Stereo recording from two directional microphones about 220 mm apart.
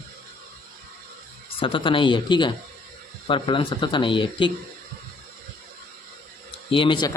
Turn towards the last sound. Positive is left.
turn(degrees=20)  # may be behind; listen again after turning